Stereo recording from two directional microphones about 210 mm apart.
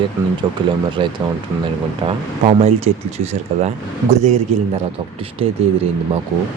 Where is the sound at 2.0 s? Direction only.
25° right (ahead or behind).